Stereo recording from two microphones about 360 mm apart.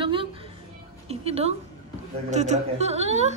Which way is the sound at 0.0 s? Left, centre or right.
Centre.